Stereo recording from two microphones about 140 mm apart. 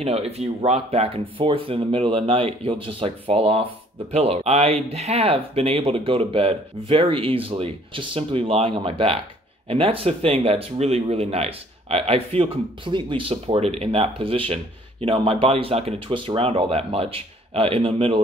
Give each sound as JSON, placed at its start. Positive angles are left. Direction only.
{"t": 0.0, "sound": "speech", "side_deg": -45}